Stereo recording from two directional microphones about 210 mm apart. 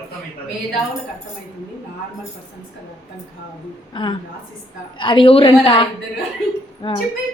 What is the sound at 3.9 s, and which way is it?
A woman's voice, 25° left (ahead or behind).